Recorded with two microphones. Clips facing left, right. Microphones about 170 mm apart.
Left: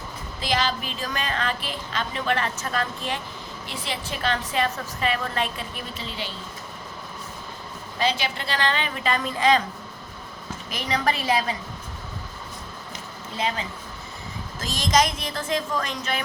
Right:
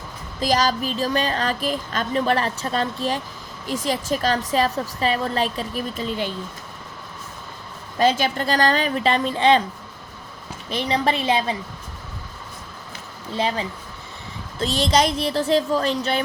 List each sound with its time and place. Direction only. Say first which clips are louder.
0.3 s a woman's voice: right 5 dB; 40° right (ahead or behind)
7.9 s a woman's voice: right 6 dB; 45° right (ahead or behind); by 9.6 s 30° right (ahead or behind)
10.7 s a woman's voice: right 4 dB; 30° right (ahead or behind)
13.3 s a woman's voice: right 4 dB; 30° right (ahead or behind)